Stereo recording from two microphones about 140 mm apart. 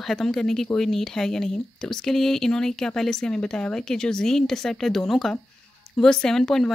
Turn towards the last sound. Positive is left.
turn(degrees=5)  # may be behind; listen again after turning